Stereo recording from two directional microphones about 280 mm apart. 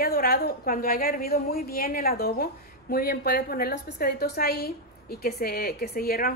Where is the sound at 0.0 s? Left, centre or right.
Left.